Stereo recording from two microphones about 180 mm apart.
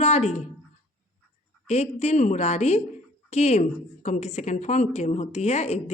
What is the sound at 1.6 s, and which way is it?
A woman's voice, 35° left (ahead or behind).